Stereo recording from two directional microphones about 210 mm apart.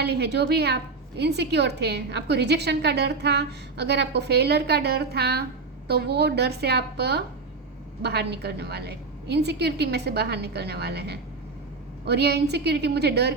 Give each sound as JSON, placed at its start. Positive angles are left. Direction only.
{"t": 0.0, "sound": "a woman's voice", "side_deg": -50}